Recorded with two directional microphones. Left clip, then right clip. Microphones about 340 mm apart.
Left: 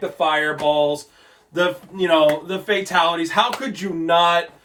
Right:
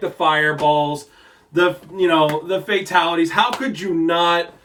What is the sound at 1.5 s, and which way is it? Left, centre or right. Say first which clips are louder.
Speech: right 3 dB; centre.